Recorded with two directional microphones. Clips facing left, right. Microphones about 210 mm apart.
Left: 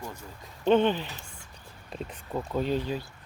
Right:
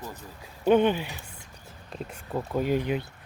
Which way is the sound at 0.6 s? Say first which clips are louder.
Right 2 dB; 10° right (ahead or behind).